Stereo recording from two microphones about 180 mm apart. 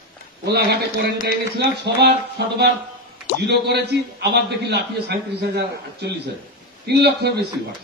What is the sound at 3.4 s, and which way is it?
A man's voice, 70° right (ahead or behind).